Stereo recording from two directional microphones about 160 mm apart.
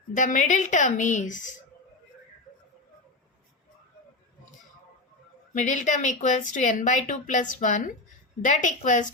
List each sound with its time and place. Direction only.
0.1 s speech: 50° left (ahead or behind)
5.6 s speech: 50° left (ahead or behind)